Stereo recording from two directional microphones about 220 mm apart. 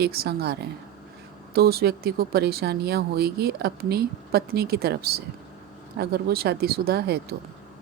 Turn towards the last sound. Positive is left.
turn(degrees=-45)  # may be behind; listen again after turning